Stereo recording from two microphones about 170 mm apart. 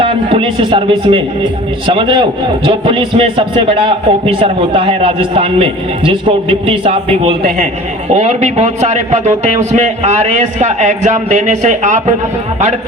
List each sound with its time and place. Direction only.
0.0 s a man's voice: 35° right (ahead or behind)